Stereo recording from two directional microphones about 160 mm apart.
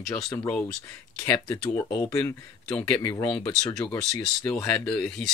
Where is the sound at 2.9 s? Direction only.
20° left (ahead or behind).